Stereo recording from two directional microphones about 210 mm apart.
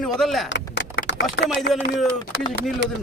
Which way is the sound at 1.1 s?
60° left (ahead or behind).